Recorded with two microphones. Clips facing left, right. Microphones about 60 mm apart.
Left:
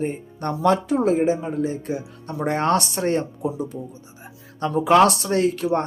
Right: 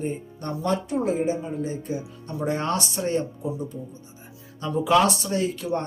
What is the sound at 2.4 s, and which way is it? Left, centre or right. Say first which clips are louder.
Speech: left 5 dB; left.